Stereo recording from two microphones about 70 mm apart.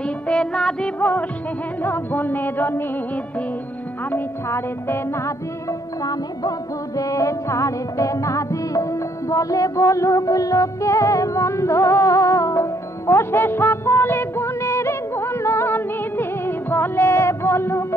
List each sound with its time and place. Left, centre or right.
0.0 s music: centre
0.9 s music: left
4.5 s music: left
7.0 s music: left